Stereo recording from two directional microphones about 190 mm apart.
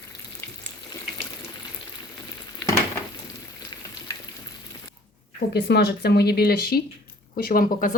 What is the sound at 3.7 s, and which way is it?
Frying, 25° left (ahead or behind).